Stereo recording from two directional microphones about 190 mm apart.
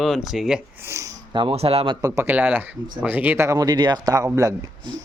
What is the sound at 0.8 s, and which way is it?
Speech, 15° right (ahead or behind).